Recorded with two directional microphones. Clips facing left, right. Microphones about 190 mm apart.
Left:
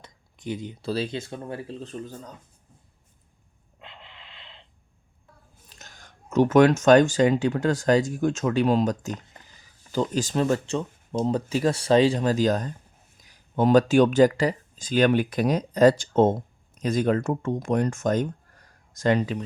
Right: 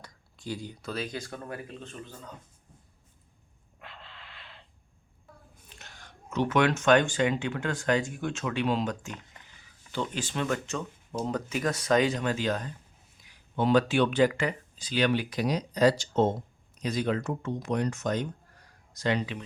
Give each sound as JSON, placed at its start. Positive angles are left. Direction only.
{"t": 0.0, "sound": "a sound", "side_deg": 20}
{"t": 0.9, "sound": "speech", "side_deg": 30}
{"t": 3.8, "sound": "snort", "side_deg": 20}
{"t": 5.6, "sound": "speech", "side_deg": 40}